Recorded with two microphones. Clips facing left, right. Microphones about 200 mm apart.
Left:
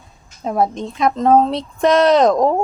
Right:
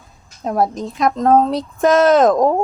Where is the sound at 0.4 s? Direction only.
Centre (ahead or behind).